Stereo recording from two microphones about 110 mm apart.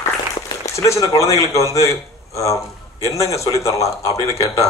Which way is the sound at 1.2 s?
30° left (ahead or behind).